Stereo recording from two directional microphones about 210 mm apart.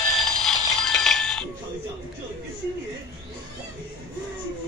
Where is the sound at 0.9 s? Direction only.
Centre (ahead or behind).